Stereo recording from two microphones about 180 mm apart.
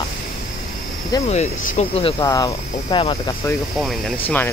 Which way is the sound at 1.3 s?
35° left (ahead or behind).